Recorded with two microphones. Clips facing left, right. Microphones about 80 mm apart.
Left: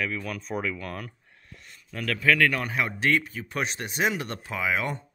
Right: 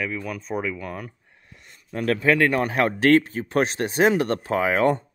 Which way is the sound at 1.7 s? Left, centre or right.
Right.